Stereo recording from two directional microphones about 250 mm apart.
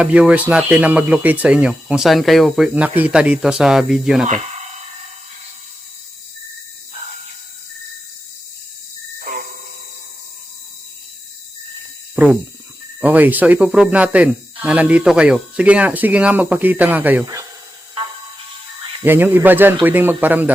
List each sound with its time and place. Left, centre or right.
0.0 s speech: centre
9.1 s a sound: right
12.1 s speech: centre
18.9 s speech: centre